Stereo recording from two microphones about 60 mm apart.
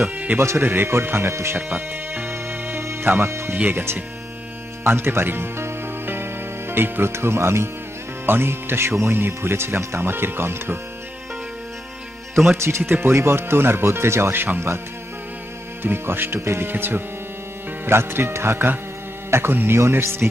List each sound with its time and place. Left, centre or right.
0.4 s speech: right
1.8 s music: right
3.7 s speech: right
4.8 s music: right
8.3 s speech: right
12.5 s speech: right
15.8 s speech: right